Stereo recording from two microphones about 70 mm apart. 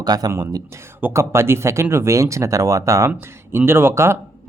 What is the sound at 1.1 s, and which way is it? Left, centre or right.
Speech, right.